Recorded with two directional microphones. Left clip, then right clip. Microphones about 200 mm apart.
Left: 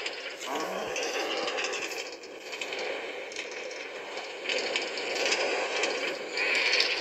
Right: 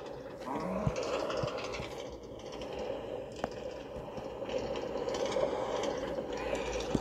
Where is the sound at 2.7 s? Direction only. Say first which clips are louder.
Left 4 dB; 15° left (ahead or behind).